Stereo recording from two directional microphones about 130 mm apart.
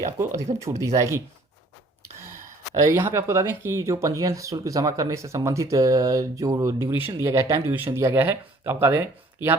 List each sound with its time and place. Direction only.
0.0 s speech: 20° right (ahead or behind)
2.8 s speech: 20° right (ahead or behind)